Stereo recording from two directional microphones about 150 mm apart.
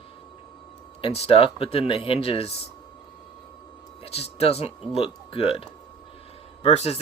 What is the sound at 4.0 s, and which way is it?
Speech, 40° left (ahead or behind).